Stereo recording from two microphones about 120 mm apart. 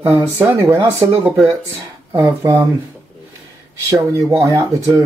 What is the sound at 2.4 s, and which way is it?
Speech, 25° right (ahead or behind).